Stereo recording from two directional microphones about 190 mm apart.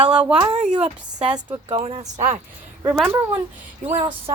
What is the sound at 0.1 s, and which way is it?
Speech, 5° right (ahead or behind).